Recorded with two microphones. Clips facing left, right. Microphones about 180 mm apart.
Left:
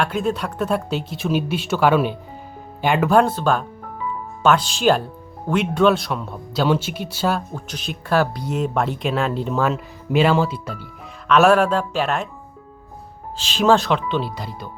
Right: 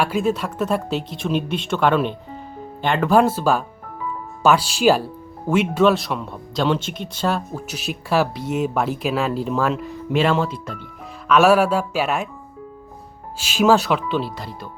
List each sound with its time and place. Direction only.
0.0 s speech: 5° right (ahead or behind)
3.1 s speech: 5° right (ahead or behind)
13.3 s speech: 10° right (ahead or behind)